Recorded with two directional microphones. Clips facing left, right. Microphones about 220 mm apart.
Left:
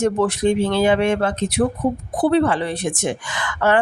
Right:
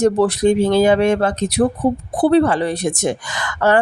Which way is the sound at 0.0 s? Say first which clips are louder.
Right 4 dB; 35° right (ahead or behind).